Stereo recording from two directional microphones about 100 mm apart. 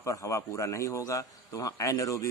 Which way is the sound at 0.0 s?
30° left (ahead or behind).